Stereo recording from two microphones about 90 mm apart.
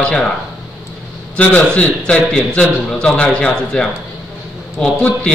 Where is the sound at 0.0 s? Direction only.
10° left (ahead or behind).